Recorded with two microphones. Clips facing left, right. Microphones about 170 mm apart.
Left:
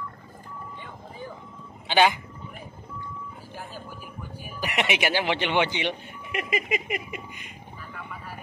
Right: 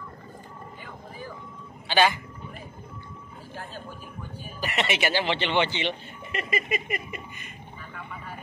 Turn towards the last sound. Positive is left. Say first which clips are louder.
# left 1 dB
turn(degrees=15)  # may be behind; listen again after turning